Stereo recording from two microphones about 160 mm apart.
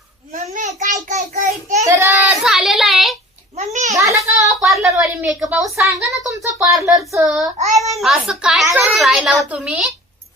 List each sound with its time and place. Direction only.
0.3 s a sound: 50° right (ahead or behind)
0.8 s child singing: 50° right (ahead or behind)
1.8 s child singing: 15° right (ahead or behind)
3.6 s babbling: 45° right (ahead or behind)
3.9 s a sound: 20° right (ahead or behind)
4.6 s a woman's voice: centre (ahead or behind)
6.4 s speech: 20° right (ahead or behind)
7.2 s a woman's voice: centre (ahead or behind)